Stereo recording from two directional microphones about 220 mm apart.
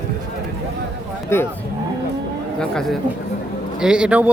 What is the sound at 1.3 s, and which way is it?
Speech, 10° left (ahead or behind).